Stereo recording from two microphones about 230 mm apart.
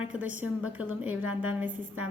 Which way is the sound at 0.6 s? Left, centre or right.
Centre.